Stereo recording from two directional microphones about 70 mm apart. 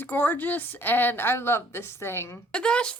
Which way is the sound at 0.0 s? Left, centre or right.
Left.